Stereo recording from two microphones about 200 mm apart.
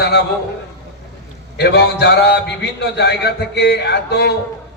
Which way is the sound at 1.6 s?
55° left (ahead or behind).